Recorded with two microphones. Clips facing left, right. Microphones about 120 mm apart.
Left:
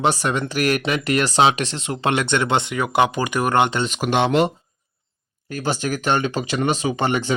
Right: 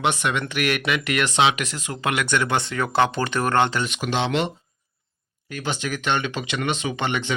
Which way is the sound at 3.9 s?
45° left (ahead or behind).